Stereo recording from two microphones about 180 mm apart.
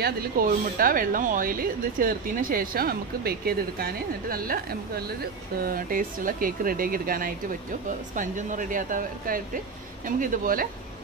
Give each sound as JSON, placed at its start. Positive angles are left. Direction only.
{"t": 0.0, "sound": "a woman's voice", "side_deg": -50}